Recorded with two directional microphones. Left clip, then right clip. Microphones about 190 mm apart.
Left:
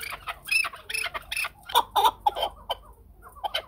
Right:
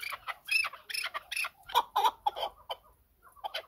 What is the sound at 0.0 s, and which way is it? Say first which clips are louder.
Chicken: left 4 dB; 20° right (ahead or behind).